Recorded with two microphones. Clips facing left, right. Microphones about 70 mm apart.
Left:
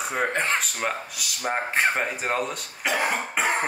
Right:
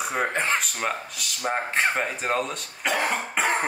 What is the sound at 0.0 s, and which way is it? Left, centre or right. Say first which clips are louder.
Speech: even; centre.